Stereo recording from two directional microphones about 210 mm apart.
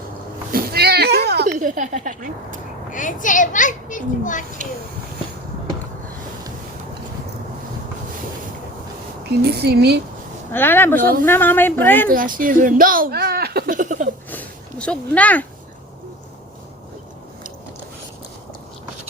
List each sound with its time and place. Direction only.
0.5 s cat: 50° right (ahead or behind)
2.9 s a child's voice: 40° left (ahead or behind)
9.2 s a woman's voice: 50° right (ahead or behind)
10.5 s a woman's voice: 10° left (ahead or behind)
12.0 s speech: 40° right (ahead or behind)
14.3 s a sound: 5° left (ahead or behind)